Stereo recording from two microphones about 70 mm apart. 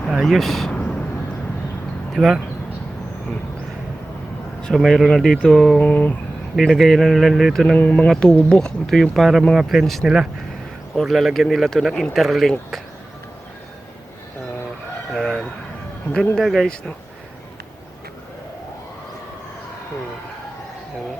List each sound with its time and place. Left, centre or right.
0.1 s speech: centre
0.7 s vehicle: centre
2.1 s speech: centre
4.6 s speech: centre
5.8 s a sound: left
6.6 s speech: centre
7.8 s a sound: left
8.0 s speech: centre
15.1 s chicken: centre
16.4 s speech: centre